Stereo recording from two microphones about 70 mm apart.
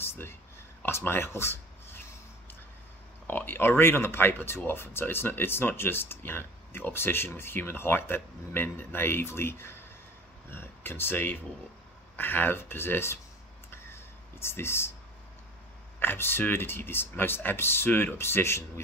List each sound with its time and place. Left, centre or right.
0.0 s a sound: left
0.8 s speech: left
3.3 s speech: left
14.4 s speech: left
16.0 s speech: left